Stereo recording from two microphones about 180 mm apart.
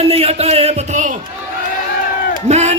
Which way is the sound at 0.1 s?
35° right (ahead or behind).